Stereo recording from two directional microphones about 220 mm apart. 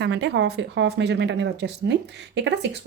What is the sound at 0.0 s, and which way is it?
Speech, 50° right (ahead or behind).